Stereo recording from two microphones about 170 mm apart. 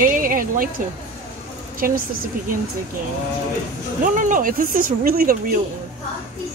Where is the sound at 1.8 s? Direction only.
55° right (ahead or behind).